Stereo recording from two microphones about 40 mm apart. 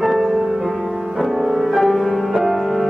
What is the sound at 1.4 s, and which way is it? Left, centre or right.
Music, centre.